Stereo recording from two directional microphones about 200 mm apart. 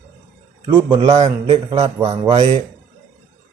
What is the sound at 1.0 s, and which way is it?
Speech, 30° right (ahead or behind).